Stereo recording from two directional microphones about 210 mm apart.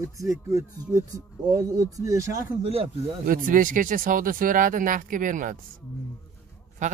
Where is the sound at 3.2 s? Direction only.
40° right (ahead or behind).